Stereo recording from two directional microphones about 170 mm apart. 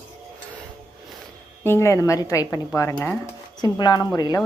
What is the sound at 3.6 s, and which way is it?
Speech, 25° left (ahead or behind).